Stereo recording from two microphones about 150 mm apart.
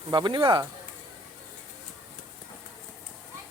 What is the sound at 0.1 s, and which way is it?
Speech, 30° right (ahead or behind).